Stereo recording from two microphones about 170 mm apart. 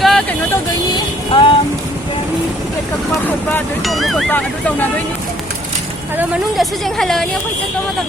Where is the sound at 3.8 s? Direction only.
Centre (ahead or behind).